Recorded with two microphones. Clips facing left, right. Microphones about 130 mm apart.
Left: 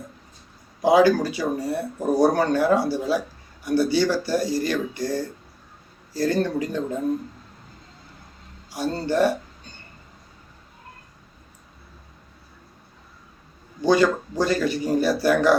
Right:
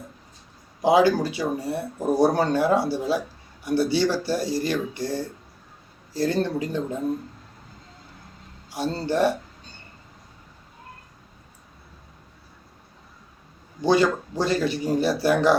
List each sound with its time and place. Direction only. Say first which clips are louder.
0.8 s speech: left 2 dB; 25° right (ahead or behind)
6.1 s speech: left 1 dB; 25° right (ahead or behind)
8.7 s speech: left 1 dB; 25° right (ahead or behind)
13.8 s speech: left 1 dB; 25° right (ahead or behind)